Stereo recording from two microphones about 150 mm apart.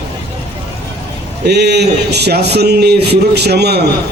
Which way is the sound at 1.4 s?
90° right.